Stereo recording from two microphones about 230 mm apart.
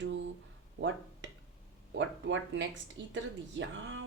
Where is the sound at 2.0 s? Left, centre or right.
Right.